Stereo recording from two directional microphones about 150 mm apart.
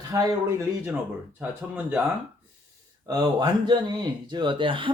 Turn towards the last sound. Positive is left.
turn(degrees=-35)  # may be behind; listen again after turning